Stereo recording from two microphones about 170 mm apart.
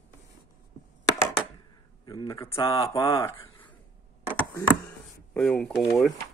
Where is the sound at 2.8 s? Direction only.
20° left (ahead or behind).